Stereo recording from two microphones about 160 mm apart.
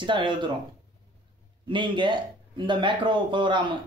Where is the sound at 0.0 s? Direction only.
30° right (ahead or behind).